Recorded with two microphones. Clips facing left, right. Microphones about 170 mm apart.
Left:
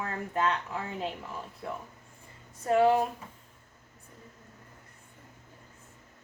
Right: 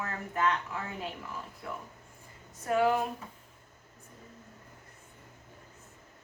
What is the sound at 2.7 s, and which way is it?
Speech, 30° left (ahead or behind).